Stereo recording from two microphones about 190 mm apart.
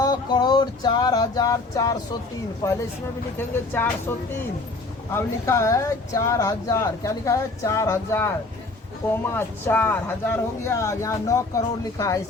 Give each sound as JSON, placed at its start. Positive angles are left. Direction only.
{"t": 0.0, "sound": "music", "side_deg": 25}
{"t": 2.6, "sound": "speech", "side_deg": 15}
{"t": 5.1, "sound": "speech", "side_deg": 15}
{"t": 9.3, "sound": "speech", "side_deg": 10}